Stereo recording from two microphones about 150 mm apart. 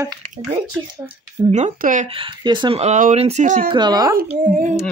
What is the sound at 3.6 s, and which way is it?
Speech, 30° right (ahead or behind).